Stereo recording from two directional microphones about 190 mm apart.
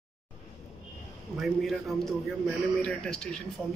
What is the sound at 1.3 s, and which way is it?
Speech, centre (ahead or behind).